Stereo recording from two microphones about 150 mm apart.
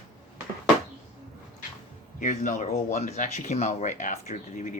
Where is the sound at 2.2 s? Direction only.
55° left (ahead or behind).